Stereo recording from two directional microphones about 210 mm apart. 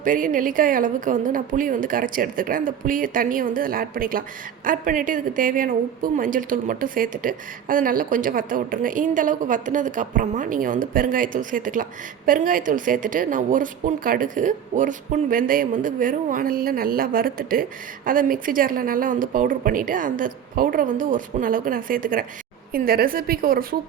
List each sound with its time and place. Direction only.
0.0 s a woman's voice: 40° right (ahead or behind)